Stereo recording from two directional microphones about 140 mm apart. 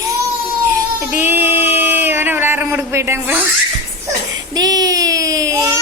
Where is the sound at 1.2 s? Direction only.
15° right (ahead or behind).